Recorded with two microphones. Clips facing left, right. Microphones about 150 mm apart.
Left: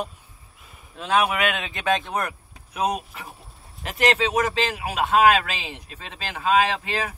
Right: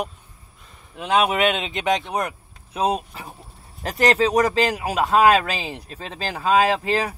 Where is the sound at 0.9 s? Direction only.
20° right (ahead or behind); by 7.1 s 35° right (ahead or behind).